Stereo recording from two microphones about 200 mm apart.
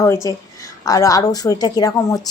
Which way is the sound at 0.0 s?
15° left (ahead or behind).